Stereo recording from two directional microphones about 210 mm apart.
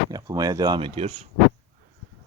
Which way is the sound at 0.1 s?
20° right (ahead or behind).